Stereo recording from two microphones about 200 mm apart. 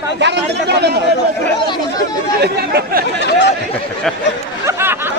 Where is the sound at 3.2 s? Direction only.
60° left (ahead or behind).